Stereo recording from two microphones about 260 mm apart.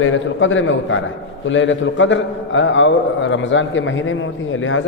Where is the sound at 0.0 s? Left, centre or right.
Left.